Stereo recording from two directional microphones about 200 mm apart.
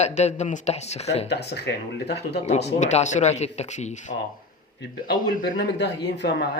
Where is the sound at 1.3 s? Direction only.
55° left (ahead or behind).